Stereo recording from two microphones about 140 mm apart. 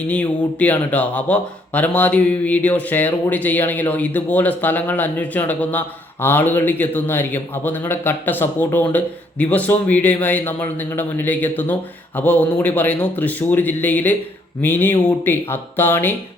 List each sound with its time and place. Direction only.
0.1 s a man's voice: 10° left (ahead or behind)